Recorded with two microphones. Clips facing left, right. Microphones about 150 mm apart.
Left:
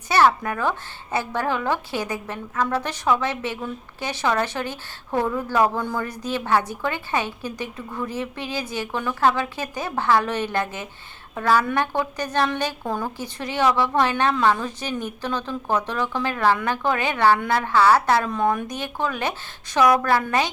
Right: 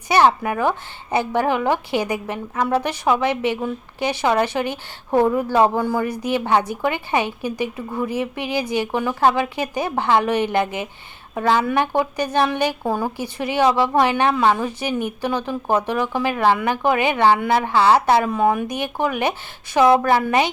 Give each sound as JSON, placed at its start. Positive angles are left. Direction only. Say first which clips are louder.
{"t": 0.1, "sound": "a woman's voice", "louder": "right 2 dB", "side_deg": -15}